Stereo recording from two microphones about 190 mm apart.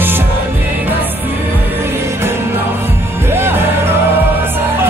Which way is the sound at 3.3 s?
10° right (ahead or behind).